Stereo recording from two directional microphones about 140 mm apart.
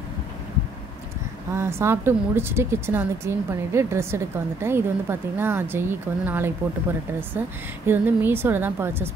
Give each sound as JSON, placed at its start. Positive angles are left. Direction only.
{"t": 1.5, "sound": "speech", "side_deg": -20}